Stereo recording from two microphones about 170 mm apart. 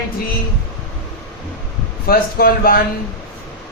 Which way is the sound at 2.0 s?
60° left (ahead or behind).